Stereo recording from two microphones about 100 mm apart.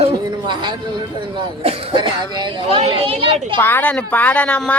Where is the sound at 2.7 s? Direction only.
65° right (ahead or behind).